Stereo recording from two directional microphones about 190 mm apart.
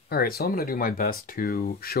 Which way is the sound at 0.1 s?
55° left (ahead or behind).